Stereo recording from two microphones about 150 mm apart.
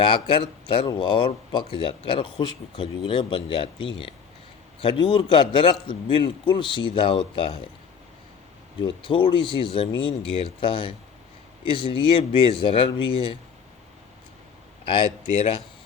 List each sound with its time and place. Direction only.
0.0 s speech: 35° left (ahead or behind)
4.8 s speech: 35° left (ahead or behind)
8.8 s speech: 35° left (ahead or behind)
14.8 s speech: 35° left (ahead or behind)